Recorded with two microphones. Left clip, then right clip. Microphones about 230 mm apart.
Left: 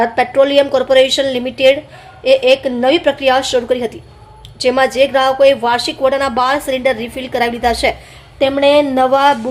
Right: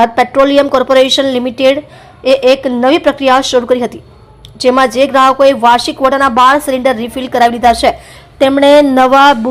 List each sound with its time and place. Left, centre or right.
0.0 s a woman's voice: centre